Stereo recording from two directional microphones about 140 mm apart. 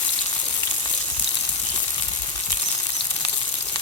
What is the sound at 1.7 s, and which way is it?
Frying, 30° left (ahead or behind).